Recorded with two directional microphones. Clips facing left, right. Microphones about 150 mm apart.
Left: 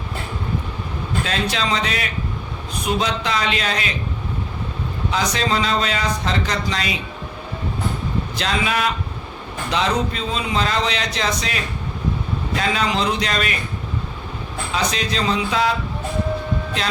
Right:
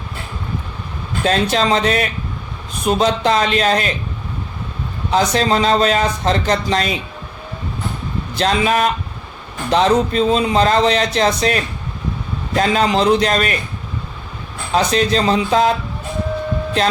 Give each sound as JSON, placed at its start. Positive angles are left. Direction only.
{"t": 1.2, "sound": "speech", "side_deg": -45}
{"t": 5.3, "sound": "speech", "side_deg": -45}
{"t": 8.4, "sound": "speech", "side_deg": -45}
{"t": 14.7, "sound": "speech", "side_deg": -45}